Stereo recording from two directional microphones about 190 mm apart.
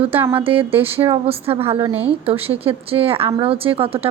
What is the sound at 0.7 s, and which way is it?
Speech, 10° right (ahead or behind).